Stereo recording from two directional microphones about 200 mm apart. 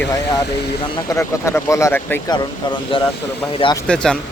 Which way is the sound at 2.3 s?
25° left (ahead or behind).